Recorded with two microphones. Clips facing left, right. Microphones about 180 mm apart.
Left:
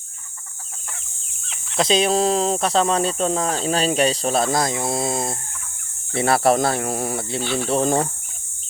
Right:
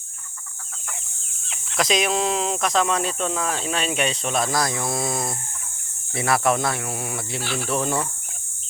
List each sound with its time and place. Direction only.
1.7 s speech: 30° left (ahead or behind)